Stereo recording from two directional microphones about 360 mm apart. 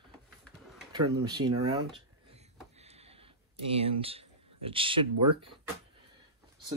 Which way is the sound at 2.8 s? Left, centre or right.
Centre.